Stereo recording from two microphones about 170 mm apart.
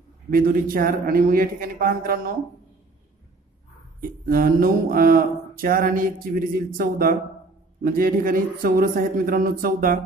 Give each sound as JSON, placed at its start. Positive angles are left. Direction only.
{"t": 0.3, "sound": "speech", "side_deg": -60}
{"t": 4.3, "sound": "speech", "side_deg": -55}